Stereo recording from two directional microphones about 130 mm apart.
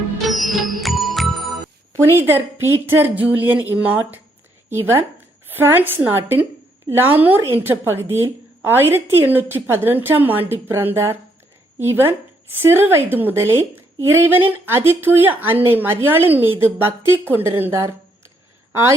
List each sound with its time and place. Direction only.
0.3 s music: centre (ahead or behind)
2.1 s a woman's voice: 15° right (ahead or behind)